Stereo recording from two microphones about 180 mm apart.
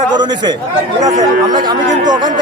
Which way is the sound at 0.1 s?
25° right (ahead or behind).